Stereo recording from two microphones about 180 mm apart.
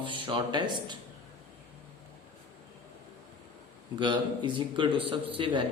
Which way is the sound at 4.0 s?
25° right (ahead or behind).